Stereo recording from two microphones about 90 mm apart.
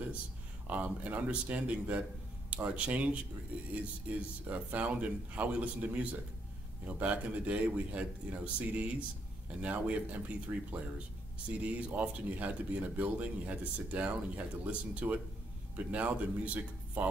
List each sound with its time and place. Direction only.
0.7 s speech: 15° right (ahead or behind)